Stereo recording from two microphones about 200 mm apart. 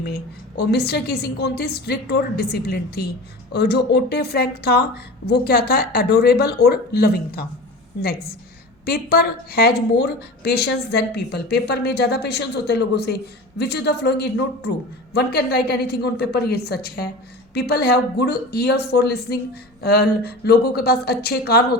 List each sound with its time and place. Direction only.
0.0 s a woman's voice: 55° left (ahead or behind)